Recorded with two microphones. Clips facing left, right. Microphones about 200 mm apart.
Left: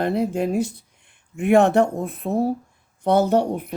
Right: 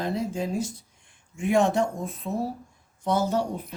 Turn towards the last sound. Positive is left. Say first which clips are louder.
# left 7 dB
turn(degrees=65)  # may be behind; listen again after turning